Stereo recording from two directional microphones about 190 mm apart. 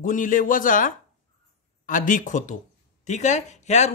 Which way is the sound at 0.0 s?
45° left (ahead or behind).